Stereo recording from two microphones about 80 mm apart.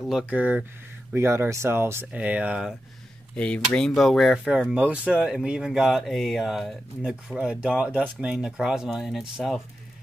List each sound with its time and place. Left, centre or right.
0.0 s speech: centre
0.3 s speech: centre
1.1 s speech: right
2.1 s speech: centre
3.3 s speech: centre
4.5 s speech: centre
5.2 s speech: centre